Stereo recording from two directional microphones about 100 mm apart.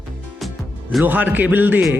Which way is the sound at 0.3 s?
Centre (ahead or behind).